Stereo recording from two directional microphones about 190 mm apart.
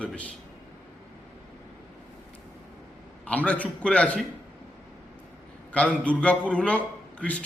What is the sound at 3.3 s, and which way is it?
Speech, 5° left (ahead or behind).